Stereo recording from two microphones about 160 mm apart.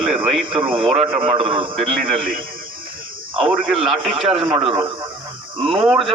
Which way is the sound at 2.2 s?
60° right (ahead or behind).